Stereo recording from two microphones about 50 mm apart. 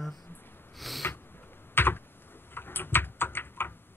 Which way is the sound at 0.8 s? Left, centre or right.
Centre.